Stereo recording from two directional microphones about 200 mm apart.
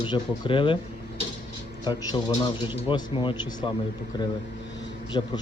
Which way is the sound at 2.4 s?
25° left (ahead or behind).